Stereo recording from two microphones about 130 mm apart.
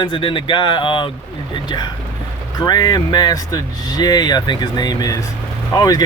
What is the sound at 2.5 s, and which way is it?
Speech, 30° left (ahead or behind).